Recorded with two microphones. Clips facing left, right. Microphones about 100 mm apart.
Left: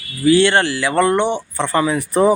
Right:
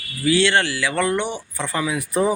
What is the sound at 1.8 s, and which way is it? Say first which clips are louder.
Speech: left 5 dB; 40° left (ahead or behind).